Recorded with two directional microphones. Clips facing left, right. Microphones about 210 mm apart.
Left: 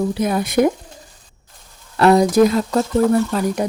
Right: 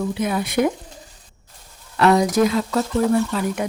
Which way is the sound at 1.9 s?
35° left (ahead or behind).